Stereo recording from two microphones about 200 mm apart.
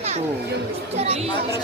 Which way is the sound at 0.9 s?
30° right (ahead or behind).